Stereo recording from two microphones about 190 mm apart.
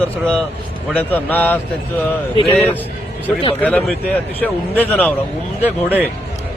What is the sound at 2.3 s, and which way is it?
Speech, 30° left (ahead or behind).